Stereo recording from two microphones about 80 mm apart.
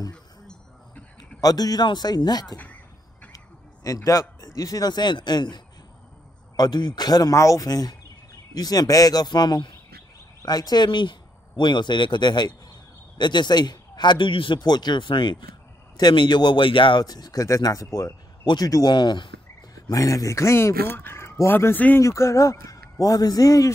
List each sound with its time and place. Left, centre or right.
0.1 s a sound: centre
1.4 s a man's voice: left
2.5 s a woman's voice: centre
3.3 s a man's voice: left
7.3 s a man's voice: left
16.0 s speech: left
17.0 s a man's voice: left
18.7 s speech: left
19.7 s speech: left
22.0 s a man's voice: left